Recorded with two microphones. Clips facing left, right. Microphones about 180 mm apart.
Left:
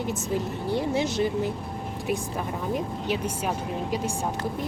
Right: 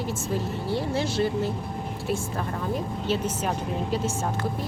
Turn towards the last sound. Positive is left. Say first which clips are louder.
# right 1 dB
turn(degrees=15)  # may be behind; listen again after turning